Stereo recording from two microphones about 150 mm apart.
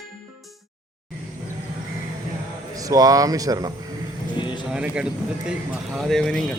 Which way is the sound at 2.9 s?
25° right (ahead or behind).